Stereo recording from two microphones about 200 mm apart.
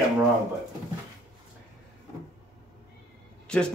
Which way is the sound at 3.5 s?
5° left (ahead or behind).